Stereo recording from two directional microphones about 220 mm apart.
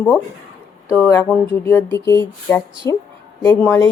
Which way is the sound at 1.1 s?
5° left (ahead or behind).